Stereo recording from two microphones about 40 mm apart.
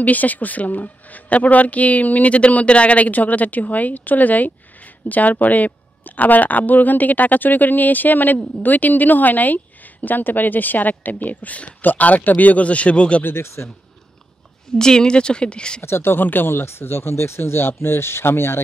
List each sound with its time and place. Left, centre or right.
0.0 s speech: left
13.2 s speech: left
14.8 s speech: centre
15.8 s speech: left